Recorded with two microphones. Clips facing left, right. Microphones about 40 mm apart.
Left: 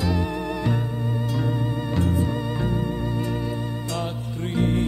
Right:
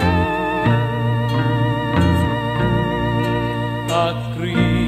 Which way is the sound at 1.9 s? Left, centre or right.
Right.